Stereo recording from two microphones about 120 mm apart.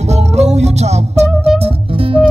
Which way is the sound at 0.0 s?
65° right (ahead or behind).